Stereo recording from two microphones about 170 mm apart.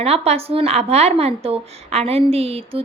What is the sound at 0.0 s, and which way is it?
A woman's voice, 35° right (ahead or behind).